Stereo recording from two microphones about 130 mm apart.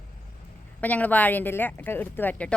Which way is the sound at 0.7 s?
10° left (ahead or behind).